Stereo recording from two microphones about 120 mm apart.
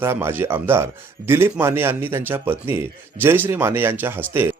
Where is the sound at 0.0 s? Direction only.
20° right (ahead or behind).